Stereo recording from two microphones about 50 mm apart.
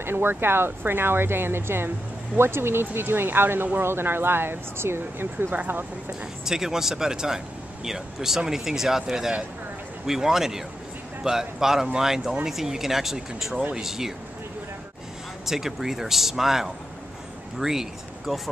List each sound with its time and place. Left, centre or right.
0.0 s speech: right
3.8 s speech: right
5.5 s speech: right
6.4 s speech: centre
15.4 s speech: centre